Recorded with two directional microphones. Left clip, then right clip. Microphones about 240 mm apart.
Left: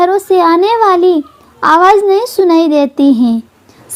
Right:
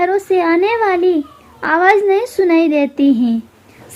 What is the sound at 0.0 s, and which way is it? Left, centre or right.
A child's voice, centre.